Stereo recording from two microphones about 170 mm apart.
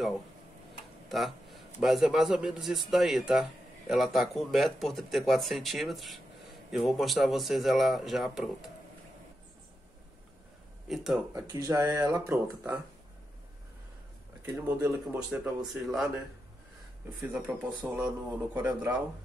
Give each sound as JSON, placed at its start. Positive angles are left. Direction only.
{"t": 1.0, "sound": "speech", "side_deg": 0}
{"t": 10.9, "sound": "speech", "side_deg": -5}
{"t": 11.3, "sound": "speech", "side_deg": -20}
{"t": 14.5, "sound": "speech", "side_deg": -15}
{"t": 17.2, "sound": "speech", "side_deg": -10}